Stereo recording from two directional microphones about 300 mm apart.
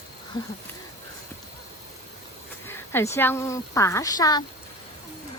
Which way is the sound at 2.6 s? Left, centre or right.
Centre.